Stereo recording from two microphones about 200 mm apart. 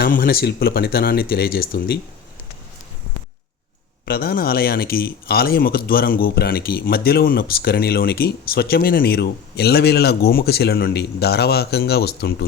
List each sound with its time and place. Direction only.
0.0 s speech: 50° left (ahead or behind)
4.0 s speech: 50° left (ahead or behind)